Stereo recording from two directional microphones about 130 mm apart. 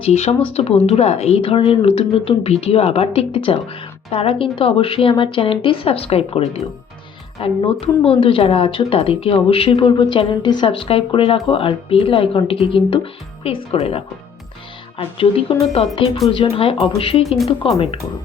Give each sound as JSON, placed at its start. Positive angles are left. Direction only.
{"t": 0.0, "sound": "speech", "side_deg": 55}
{"t": 17.2, "sound": "speech", "side_deg": 0}
{"t": 17.5, "sound": "speech", "side_deg": 45}